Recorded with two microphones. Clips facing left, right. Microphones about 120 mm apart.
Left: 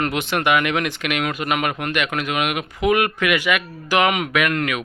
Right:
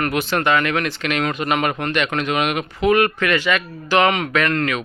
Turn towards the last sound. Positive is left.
turn(degrees=10)  # may be behind; listen again after turning